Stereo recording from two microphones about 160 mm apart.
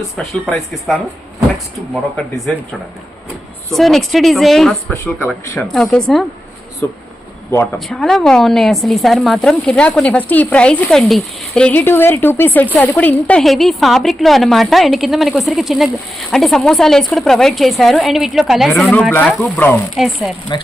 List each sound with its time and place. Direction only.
0.2 s a woman's voice: centre (ahead or behind)
2.1 s a woman's voice: centre (ahead or behind)
3.7 s a woman's voice: centre (ahead or behind)
7.9 s a woman's voice: centre (ahead or behind)
20.0 s a woman's voice: centre (ahead or behind)
20.5 s speech: 30° left (ahead or behind)